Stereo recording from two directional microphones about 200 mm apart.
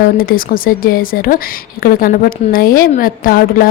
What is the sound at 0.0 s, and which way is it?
A woman's voice, 45° left (ahead or behind).